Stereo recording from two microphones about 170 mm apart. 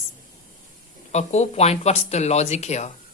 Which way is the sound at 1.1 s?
40° left (ahead or behind).